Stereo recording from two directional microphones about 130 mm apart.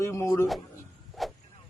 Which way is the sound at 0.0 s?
20° left (ahead or behind).